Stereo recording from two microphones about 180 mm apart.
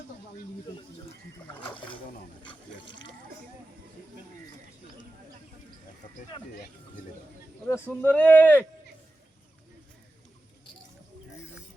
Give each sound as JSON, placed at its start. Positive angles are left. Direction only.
{"t": 1.6, "sound": "boat", "side_deg": 30}
{"t": 2.4, "sound": "water", "side_deg": 25}
{"t": 7.7, "sound": "speech", "side_deg": 10}